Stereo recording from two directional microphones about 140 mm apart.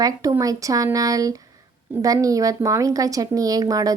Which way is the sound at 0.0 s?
25° right (ahead or behind).